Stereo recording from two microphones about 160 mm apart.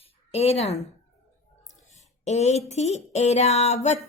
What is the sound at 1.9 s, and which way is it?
A woman's voice, 45° left (ahead or behind).